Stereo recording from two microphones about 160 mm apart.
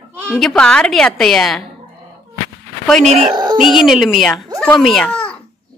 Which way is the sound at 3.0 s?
40° right (ahead or behind).